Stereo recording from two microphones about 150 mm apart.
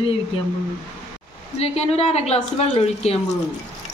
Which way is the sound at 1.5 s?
45° left (ahead or behind).